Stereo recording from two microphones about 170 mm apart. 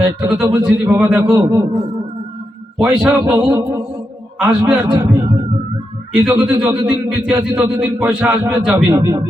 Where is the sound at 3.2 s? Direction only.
20° right (ahead or behind).